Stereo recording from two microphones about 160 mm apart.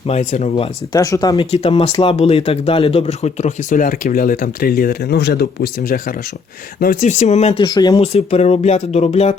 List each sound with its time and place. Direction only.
0.1 s speech: 50° left (ahead or behind)
0.9 s speech: 20° left (ahead or behind)
1.4 s speech: 40° left (ahead or behind); by 7.0 s 65° left (ahead or behind)
7.0 s speech: 45° left (ahead or behind)
7.7 s speech: 25° left (ahead or behind)
8.0 s speech: 40° left (ahead or behind)